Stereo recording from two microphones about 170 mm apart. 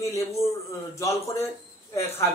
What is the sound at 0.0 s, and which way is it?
A man's voice, 20° left (ahead or behind).